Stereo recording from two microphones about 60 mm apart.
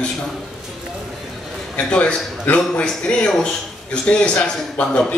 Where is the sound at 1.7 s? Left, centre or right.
Centre.